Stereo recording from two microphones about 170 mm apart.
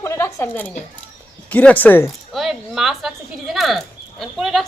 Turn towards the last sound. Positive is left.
turn(degrees=0)  # may be behind; listen again after turning